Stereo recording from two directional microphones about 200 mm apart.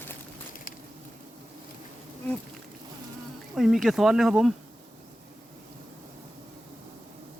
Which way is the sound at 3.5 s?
Centre (ahead or behind).